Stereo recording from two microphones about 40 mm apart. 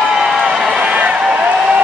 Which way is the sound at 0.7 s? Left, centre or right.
Right.